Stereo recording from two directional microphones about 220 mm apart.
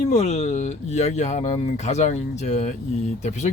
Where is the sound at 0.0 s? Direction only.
30° left (ahead or behind).